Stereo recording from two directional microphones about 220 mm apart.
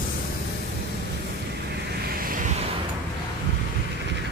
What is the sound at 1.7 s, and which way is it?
Vehicle, 45° right (ahead or behind).